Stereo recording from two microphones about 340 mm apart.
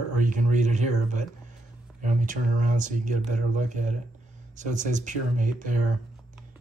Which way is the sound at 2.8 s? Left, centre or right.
Right.